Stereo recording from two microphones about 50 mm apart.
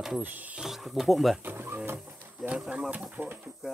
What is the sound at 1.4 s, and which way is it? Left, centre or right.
Music, right.